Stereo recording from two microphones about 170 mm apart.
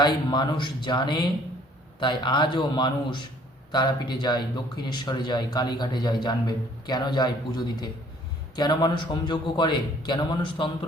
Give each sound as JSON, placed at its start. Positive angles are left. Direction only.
{"t": 0.0, "sound": "speech", "side_deg": 25}